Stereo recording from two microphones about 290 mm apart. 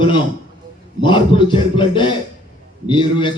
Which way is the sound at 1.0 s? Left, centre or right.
Centre.